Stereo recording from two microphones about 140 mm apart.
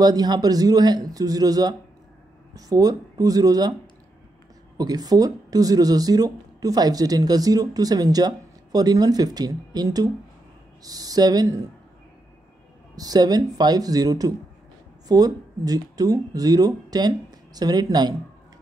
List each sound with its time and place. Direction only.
0.0 s speech: 30° right (ahead or behind)
4.7 s speech: 25° right (ahead or behind)
12.9 s speech: 25° right (ahead or behind)